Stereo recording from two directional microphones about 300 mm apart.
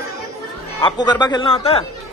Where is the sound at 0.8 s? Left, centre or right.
Centre.